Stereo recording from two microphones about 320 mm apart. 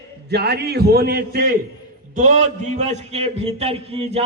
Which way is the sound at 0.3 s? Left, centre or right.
Right.